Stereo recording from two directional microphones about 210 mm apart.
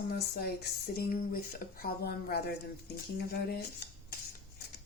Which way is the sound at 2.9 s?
50° left (ahead or behind).